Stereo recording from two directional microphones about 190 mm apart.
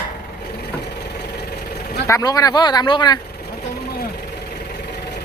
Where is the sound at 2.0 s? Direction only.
15° left (ahead or behind).